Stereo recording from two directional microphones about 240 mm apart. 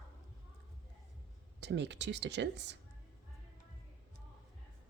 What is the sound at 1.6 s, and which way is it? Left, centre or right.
Speech, right.